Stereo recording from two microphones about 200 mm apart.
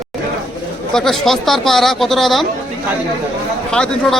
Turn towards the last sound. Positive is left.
turn(degrees=5)  # may be behind; listen again after turning